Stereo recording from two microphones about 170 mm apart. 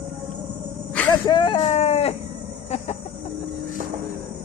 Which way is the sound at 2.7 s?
40° left (ahead or behind).